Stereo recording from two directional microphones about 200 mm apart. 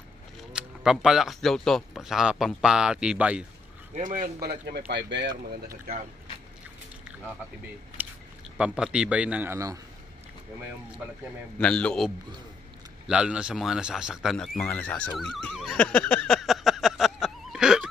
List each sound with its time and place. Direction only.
0.4 s speech: 5° right (ahead or behind)
3.9 s speech: 35° right (ahead or behind); by 5.3 s 60° right (ahead or behind)
8.0 s a sound: 10° right (ahead or behind)
8.5 s a man's voice: 5° right (ahead or behind)
11.5 s speech: 5° left (ahead or behind)
13.1 s speech: 5° right (ahead or behind)
14.6 s neigh: 10° left (ahead or behind)